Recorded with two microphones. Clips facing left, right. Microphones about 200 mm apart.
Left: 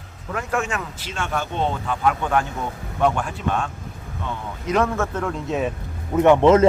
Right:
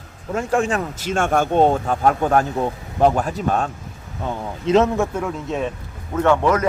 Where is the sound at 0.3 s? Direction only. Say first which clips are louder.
Right 5 dB; 30° right (ahead or behind).